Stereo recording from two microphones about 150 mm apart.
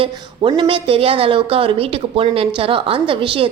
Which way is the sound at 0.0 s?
35° right (ahead or behind).